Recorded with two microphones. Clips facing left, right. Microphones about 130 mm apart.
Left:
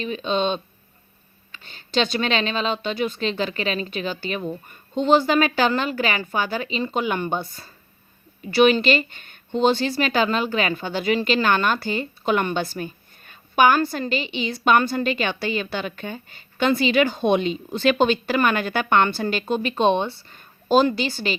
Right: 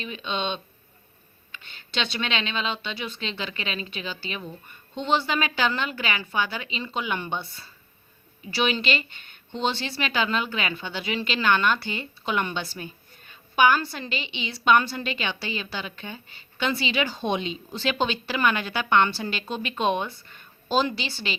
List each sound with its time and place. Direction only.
0.0 s speech: 40° left (ahead or behind)
19.7 s speech: 30° left (ahead or behind)